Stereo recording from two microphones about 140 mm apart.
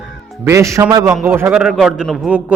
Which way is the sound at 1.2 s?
15° right (ahead or behind).